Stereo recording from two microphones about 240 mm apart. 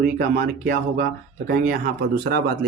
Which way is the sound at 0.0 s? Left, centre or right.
Right.